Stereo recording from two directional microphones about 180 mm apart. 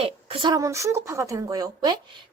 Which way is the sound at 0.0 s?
30° right (ahead or behind).